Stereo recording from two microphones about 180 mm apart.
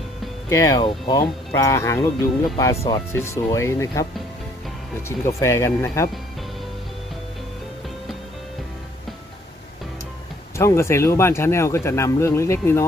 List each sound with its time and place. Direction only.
0.5 s speech: 20° left (ahead or behind)
10.6 s speech: 15° left (ahead or behind)